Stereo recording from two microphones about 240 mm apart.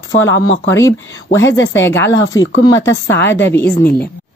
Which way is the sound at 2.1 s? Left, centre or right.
Left.